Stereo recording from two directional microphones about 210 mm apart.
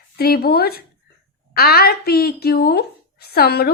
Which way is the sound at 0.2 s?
50° left (ahead or behind).